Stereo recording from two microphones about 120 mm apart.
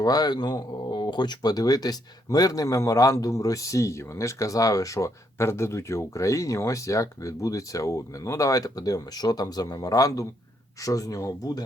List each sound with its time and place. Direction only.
0.0 s speech: 35° left (ahead or behind)